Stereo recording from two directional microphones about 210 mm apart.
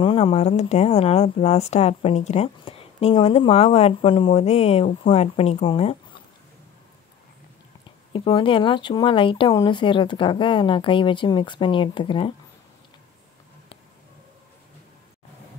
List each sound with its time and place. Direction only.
0.0 s speech: 25° left (ahead or behind)
8.1 s speech: 25° left (ahead or behind)